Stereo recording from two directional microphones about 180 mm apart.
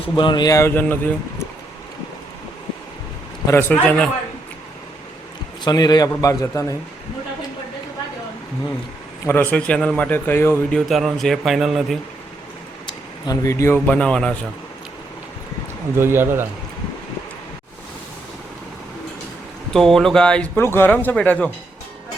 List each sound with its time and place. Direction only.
0.2 s speech: 25° left (ahead or behind)
3.4 s speech: 15° left (ahead or behind)
5.6 s a man's voice: 25° left (ahead or behind)
9.2 s speech: 10° left (ahead or behind)
10.8 s speech: centre (ahead or behind)
13.2 s speech: 20° left (ahead or behind)
13.7 s speech: 5° left (ahead or behind)
16.0 s a man's voice: 15° right (ahead or behind)
19.7 s speech: 5° left (ahead or behind)